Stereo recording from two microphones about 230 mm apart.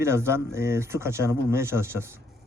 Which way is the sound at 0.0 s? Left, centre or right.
Centre.